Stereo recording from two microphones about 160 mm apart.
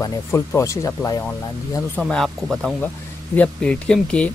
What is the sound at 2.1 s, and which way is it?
Speech, centre (ahead or behind).